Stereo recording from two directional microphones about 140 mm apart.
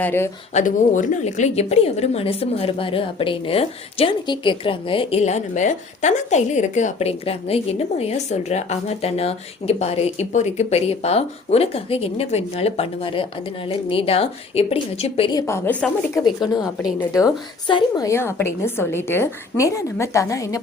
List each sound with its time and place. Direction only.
0.0 s speech: 15° left (ahead or behind)
0.5 s a woman's voice: 65° left (ahead or behind); by 15.3 s 45° left (ahead or behind)
15.3 s a woman's voice: 25° left (ahead or behind)
16.2 s a woman's voice: 30° left (ahead or behind)